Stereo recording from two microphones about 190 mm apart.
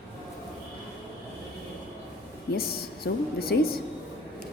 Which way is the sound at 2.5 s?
55° left (ahead or behind).